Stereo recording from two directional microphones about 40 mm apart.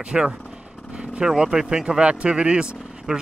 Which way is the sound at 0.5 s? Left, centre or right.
Right.